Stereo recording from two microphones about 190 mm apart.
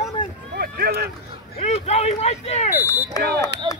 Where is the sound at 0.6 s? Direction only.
55° right (ahead or behind).